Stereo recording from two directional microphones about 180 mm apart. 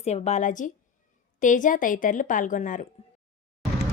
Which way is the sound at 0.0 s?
40° left (ahead or behind).